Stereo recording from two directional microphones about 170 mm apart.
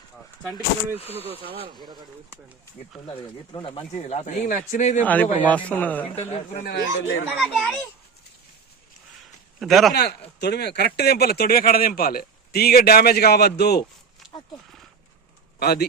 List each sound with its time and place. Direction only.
0.9 s speech: 35° left (ahead or behind)
1.5 s speech: 30° right (ahead or behind)
3.1 s speech: 30° left (ahead or behind); by 5.0 s 50° left (ahead or behind)
5.0 s a man's voice: 10° left (ahead or behind)
6.1 s speech: 40° left (ahead or behind)
6.7 s speech: 80° left
7.3 s a child's voice: centre (ahead or behind)
9.6 s speech: centre (ahead or behind)
9.9 s speech: 75° left (ahead or behind)
15.5 s speech: 70° left (ahead or behind)